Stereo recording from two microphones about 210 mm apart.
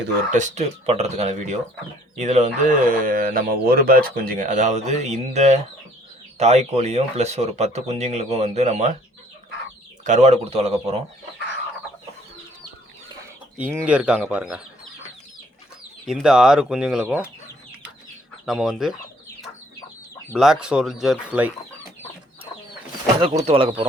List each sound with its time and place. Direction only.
0.3 s speech: 35° right (ahead or behind)
10.0 s speech: 35° right (ahead or behind)
13.6 s speech: 5° right (ahead or behind)
16.0 s speech: centre (ahead or behind)
18.4 s speech: centre (ahead or behind)
20.4 s speech: 5° right (ahead or behind)
23.5 s speech: 25° right (ahead or behind)